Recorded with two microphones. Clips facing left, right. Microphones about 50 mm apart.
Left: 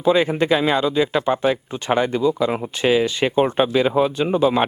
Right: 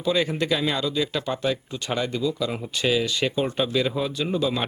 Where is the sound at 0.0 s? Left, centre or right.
Left.